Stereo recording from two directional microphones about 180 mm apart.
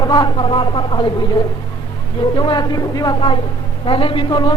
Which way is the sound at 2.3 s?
25° left (ahead or behind).